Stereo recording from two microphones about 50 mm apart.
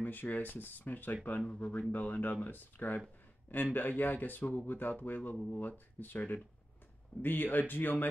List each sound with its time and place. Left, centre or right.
0.0 s speech: left